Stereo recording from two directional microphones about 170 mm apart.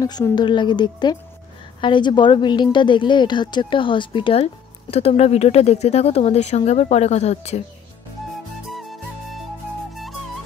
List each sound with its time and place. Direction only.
0.0 s a woman's voice: 25° left (ahead or behind); by 7.6 s 40° left (ahead or behind)
8.6 s music: centre (ahead or behind)